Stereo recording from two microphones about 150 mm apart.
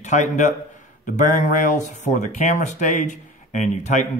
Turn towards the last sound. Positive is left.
turn(degrees=50)  # may be behind; listen again after turning